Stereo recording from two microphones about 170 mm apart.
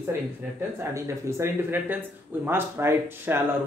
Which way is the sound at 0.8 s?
15° right (ahead or behind).